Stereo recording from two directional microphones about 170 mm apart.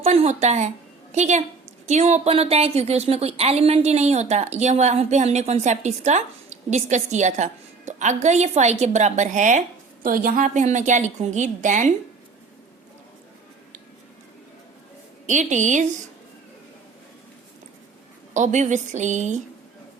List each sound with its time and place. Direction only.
0.0 s a woman's voice: 35° right (ahead or behind)
15.3 s a woman's voice: 45° right (ahead or behind)
18.3 s a woman's voice: 45° right (ahead or behind)